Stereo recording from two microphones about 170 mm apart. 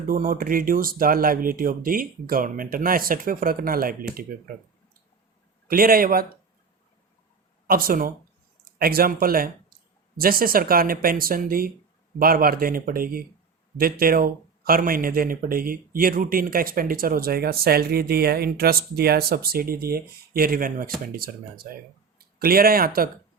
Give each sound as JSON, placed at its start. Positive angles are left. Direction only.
{"t": 0.1, "sound": "speech", "side_deg": -55}
{"t": 7.7, "sound": "speech", "side_deg": -60}